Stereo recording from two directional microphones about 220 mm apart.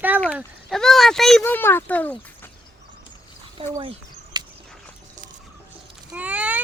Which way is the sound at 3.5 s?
25° right (ahead or behind).